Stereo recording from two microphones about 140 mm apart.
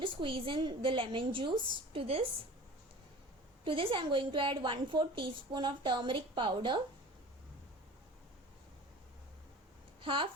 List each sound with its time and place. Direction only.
0.0 s a woman's voice: 35° right (ahead or behind)
3.6 s a woman's voice: 40° right (ahead or behind)
10.0 s speech: 40° right (ahead or behind)